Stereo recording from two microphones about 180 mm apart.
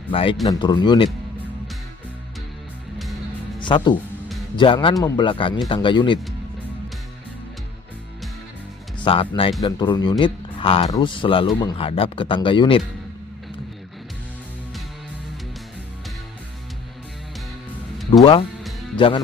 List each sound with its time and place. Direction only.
0.1 s speech: 30° left (ahead or behind)
3.5 s music: 25° left (ahead or behind)
4.6 s speech: 25° left (ahead or behind)
9.0 s speech: 30° left (ahead or behind)
18.1 s music: 25° left (ahead or behind)
18.9 s speech: 30° left (ahead or behind)